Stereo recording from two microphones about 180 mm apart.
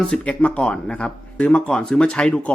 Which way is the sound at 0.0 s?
5° left (ahead or behind).